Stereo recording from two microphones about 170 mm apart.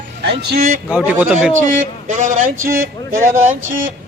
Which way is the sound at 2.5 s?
15° right (ahead or behind).